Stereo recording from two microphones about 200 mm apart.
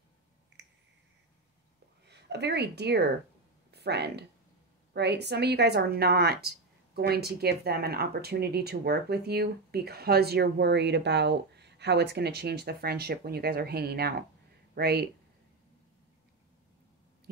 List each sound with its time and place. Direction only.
2.0 s a woman's voice: 55° right (ahead or behind)